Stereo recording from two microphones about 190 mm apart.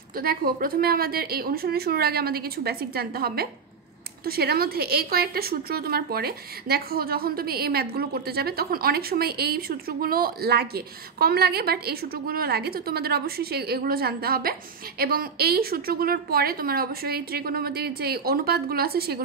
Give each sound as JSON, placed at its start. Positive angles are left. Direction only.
{"t": 0.1, "sound": "a woman's voice", "side_deg": -50}